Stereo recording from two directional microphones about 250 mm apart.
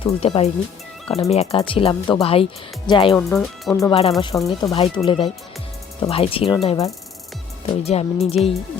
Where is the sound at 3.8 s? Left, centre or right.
Left.